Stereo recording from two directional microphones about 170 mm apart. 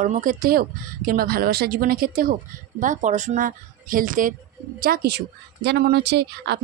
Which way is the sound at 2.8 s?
45° right (ahead or behind).